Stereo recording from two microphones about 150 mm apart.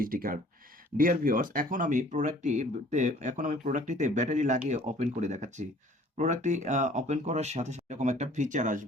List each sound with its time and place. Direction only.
0.0 s speech: 70° right (ahead or behind); by 8.8 s 55° right (ahead or behind)